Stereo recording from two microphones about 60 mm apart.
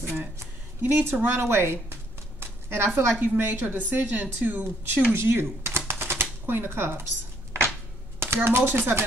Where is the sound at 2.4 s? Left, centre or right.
Right.